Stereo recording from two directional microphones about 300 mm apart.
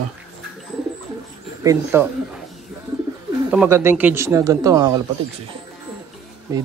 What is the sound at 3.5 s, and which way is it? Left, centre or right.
Speech, centre.